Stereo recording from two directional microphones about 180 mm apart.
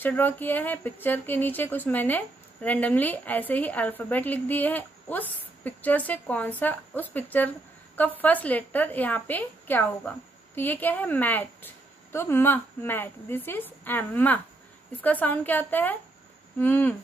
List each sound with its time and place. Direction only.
0.0 s speech: 10° left (ahead or behind)